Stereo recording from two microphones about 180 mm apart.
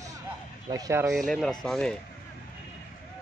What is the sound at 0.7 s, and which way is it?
Speech, 15° right (ahead or behind).